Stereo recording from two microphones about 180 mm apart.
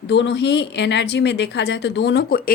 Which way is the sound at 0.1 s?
75° left (ahead or behind).